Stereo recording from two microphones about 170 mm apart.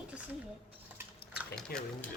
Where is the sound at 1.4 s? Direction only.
5° left (ahead or behind).